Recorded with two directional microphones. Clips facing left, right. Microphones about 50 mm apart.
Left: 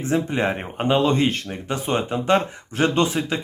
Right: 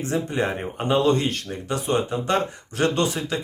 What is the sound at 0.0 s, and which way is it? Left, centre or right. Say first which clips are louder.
Speech: left 2 dB; left.